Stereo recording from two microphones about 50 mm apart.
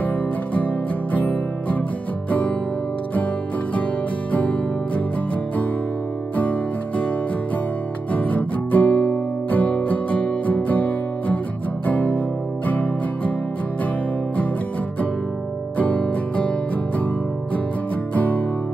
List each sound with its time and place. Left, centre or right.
1.1 s music: left
4.3 s music: left
6.3 s music: left
8.1 s music: left
15.8 s music: left
18.1 s music: left